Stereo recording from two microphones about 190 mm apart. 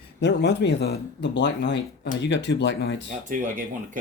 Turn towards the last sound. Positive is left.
turn(degrees=-40)  # may be behind; listen again after turning